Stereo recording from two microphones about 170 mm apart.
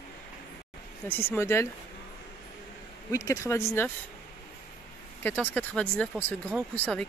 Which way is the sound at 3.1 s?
20° left (ahead or behind).